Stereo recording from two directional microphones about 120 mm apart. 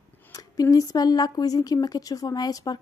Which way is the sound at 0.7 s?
30° left (ahead or behind).